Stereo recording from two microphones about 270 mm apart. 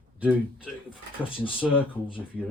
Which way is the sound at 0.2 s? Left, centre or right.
Centre.